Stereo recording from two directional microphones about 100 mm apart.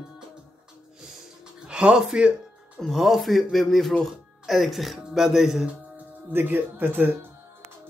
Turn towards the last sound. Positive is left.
turn(degrees=-20)  # may be behind; listen again after turning